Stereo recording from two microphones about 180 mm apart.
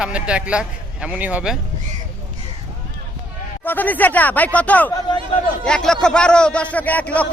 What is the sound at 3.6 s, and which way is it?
A man's voice, 10° left (ahead or behind).